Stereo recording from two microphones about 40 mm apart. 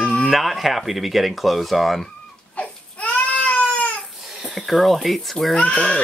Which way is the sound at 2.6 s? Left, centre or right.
Left.